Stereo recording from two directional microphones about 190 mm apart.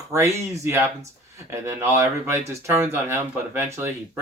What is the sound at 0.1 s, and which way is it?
Speech, 15° right (ahead or behind).